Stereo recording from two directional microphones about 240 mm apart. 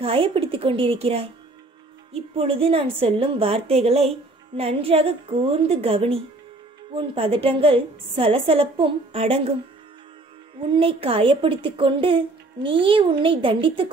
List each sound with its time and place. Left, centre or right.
0.0 s a woman's voice: right
2.3 s a woman's voice: right
10.7 s a woman's voice: right